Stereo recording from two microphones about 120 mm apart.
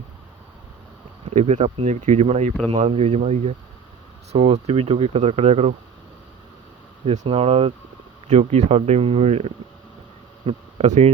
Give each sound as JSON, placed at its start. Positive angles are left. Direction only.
{"t": 1.2, "sound": "speech", "side_deg": -65}
{"t": 4.3, "sound": "speech", "side_deg": -60}
{"t": 7.0, "sound": "speech", "side_deg": -60}
{"t": 8.3, "sound": "speech", "side_deg": -65}